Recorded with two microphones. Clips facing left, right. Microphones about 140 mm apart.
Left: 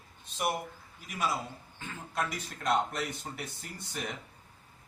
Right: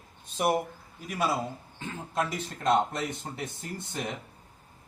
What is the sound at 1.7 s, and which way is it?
Speech, 25° right (ahead or behind).